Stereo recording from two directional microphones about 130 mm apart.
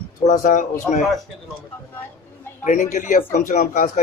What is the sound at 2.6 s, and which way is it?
A man's voice, 75° left (ahead or behind).